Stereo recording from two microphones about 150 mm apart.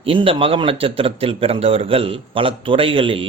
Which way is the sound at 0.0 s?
35° right (ahead or behind).